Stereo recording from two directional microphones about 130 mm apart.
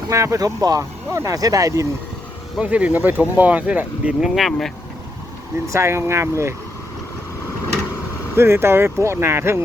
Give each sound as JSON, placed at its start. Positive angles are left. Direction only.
{"t": 0.1, "sound": "speech", "side_deg": -25}
{"t": 2.6, "sound": "speech", "side_deg": -10}
{"t": 4.4, "sound": "speech", "side_deg": 0}
{"t": 5.6, "sound": "speech", "side_deg": -20}
{"t": 8.4, "sound": "speech", "side_deg": -20}